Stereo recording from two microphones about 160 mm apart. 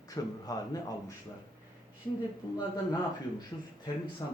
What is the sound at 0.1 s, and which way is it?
Speech, 25° left (ahead or behind).